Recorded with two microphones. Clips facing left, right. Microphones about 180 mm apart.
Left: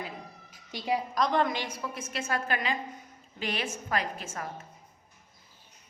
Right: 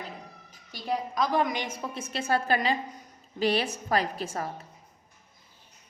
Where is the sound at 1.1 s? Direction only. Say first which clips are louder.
Right 2 dB; 5° right (ahead or behind); by 4.6 s 35° right (ahead or behind).